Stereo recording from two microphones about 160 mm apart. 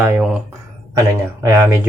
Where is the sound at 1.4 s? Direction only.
15° right (ahead or behind).